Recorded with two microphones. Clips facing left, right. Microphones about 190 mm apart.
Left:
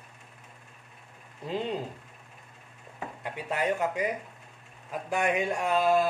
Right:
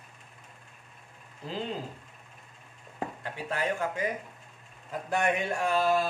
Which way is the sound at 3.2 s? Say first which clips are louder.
Left 3 dB; 15° left (ahead or behind).